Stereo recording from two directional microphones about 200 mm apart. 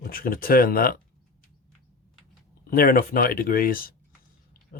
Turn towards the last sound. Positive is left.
turn(degrees=45)  # may be behind; listen again after turning